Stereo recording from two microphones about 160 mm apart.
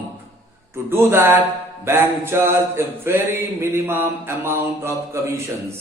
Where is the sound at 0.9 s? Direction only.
15° right (ahead or behind).